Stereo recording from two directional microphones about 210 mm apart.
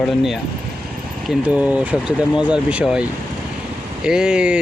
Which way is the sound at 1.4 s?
5° right (ahead or behind).